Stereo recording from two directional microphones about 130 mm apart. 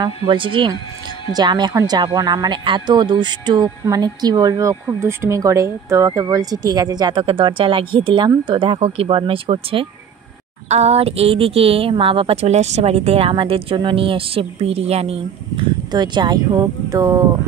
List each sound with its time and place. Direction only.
0.0 s a woman's voice: 35° right (ahead or behind)
15.9 s speech: 35° right (ahead or behind)